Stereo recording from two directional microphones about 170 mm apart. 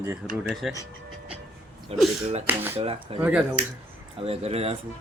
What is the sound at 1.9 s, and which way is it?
Speech, 35° right (ahead or behind).